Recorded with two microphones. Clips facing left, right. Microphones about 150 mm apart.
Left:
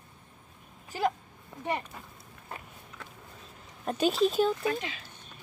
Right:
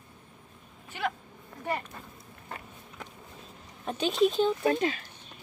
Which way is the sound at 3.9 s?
5° left (ahead or behind).